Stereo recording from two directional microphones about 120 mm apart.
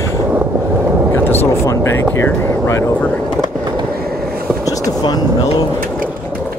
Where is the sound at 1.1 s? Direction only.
20° left (ahead or behind).